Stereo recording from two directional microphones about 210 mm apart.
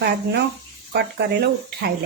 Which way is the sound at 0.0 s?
50° right (ahead or behind).